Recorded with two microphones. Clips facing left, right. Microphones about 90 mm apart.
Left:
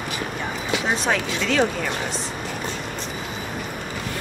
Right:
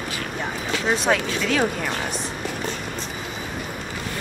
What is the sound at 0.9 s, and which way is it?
Speech, 5° right (ahead or behind).